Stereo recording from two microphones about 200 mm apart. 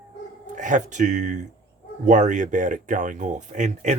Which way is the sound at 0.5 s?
40° right (ahead or behind).